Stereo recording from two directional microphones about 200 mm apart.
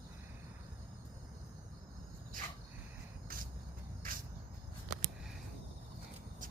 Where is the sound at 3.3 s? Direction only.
50° right (ahead or behind).